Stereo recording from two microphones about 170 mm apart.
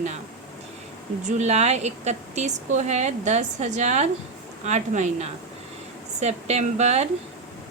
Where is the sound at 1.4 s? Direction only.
40° right (ahead or behind).